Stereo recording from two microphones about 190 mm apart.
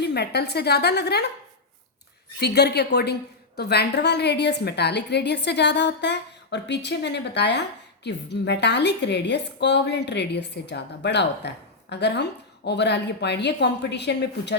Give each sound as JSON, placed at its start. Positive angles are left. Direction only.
{"t": 0.0, "sound": "a woman's voice", "side_deg": 60}
{"t": 2.4, "sound": "a woman's voice", "side_deg": 60}